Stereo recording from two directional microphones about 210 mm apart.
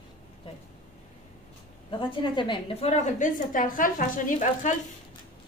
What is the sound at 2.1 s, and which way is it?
A woman's voice, 20° left (ahead or behind).